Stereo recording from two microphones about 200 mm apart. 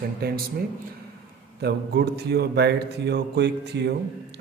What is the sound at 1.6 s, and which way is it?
Speech, 55° right (ahead or behind).